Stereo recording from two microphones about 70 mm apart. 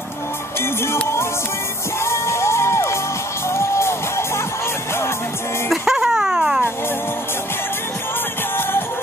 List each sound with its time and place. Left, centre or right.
0.9 s music: left
5.7 s music: centre